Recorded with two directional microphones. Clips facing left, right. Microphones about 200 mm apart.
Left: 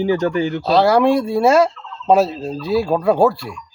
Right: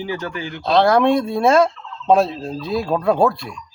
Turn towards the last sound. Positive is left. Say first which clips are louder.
# left 2 dB
turn(degrees=5)  # may be behind; listen again after turning